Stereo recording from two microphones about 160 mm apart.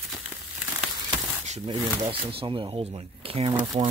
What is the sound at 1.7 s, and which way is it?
Speech, 35° right (ahead or behind).